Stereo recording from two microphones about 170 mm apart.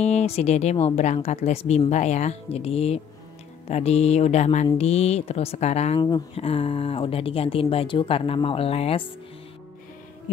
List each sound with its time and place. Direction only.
0.0 s speech: 40° left (ahead or behind)
5.9 s speech: 25° left (ahead or behind)